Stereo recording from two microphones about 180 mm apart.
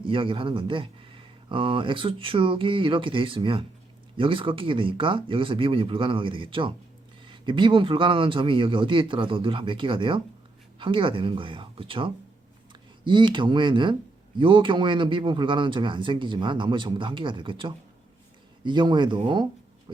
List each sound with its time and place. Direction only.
0.0 s speech: 30° right (ahead or behind)